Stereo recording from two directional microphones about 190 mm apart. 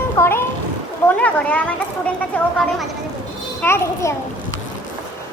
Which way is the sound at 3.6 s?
15° left (ahead or behind).